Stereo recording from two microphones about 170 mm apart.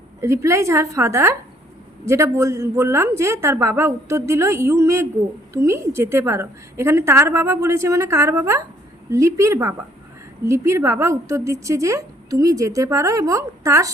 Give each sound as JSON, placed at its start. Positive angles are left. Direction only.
{"t": 0.2, "sound": "a woman's voice", "side_deg": -15}